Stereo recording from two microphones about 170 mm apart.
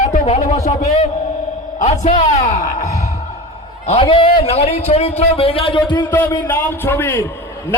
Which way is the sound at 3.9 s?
30° left (ahead or behind).